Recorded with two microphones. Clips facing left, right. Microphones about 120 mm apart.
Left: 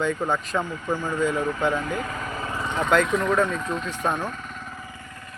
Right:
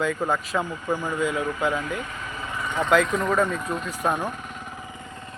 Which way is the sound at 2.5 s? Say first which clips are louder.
Right 1 dB; 30° left (ahead or behind).